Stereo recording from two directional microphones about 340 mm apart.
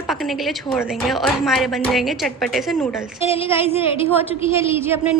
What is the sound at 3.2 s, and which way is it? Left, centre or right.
A woman's voice, centre.